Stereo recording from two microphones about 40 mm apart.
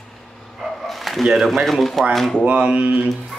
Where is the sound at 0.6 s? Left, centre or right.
Centre.